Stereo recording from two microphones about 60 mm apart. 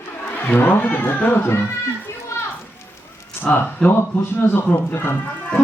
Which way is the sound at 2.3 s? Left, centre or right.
Left.